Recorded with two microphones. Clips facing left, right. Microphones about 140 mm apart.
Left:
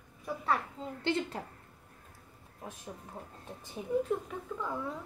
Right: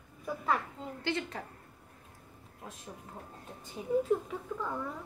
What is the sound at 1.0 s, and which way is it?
Speech, 25° left (ahead or behind).